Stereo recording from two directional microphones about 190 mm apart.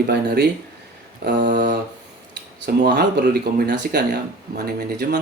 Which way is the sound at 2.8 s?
60° right (ahead or behind).